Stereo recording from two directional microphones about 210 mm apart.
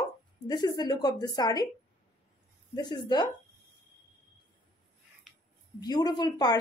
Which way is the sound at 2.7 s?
20° left (ahead or behind).